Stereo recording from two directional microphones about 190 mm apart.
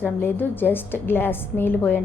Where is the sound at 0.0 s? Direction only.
10° left (ahead or behind).